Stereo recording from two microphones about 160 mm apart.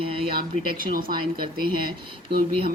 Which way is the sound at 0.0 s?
35° right (ahead or behind).